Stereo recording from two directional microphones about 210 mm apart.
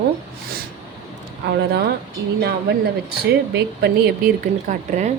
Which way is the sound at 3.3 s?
55° right (ahead or behind).